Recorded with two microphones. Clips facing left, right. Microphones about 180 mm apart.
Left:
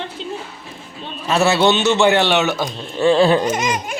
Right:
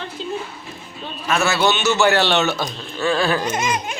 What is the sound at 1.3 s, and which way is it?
A man's voice, 30° left (ahead or behind).